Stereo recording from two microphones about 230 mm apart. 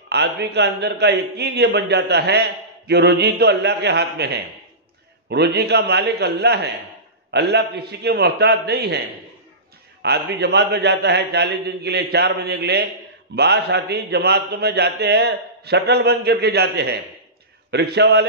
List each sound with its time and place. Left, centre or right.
0.1 s a man's voice: right
10.0 s a man's voice: right